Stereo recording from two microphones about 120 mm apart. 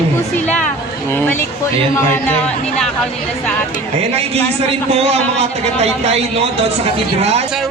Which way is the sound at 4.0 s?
60° right (ahead or behind).